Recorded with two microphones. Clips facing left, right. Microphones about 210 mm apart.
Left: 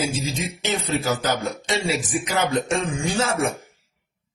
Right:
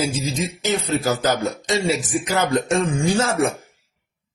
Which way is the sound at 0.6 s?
40° right (ahead or behind).